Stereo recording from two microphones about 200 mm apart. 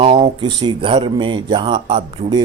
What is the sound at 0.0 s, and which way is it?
A man's voice, 25° right (ahead or behind).